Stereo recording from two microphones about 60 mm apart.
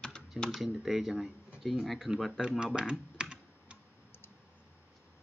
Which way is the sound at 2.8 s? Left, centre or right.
Centre.